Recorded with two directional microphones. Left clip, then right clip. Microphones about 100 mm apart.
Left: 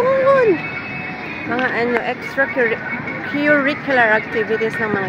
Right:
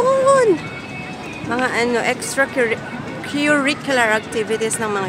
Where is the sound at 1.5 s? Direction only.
25° right (ahead or behind).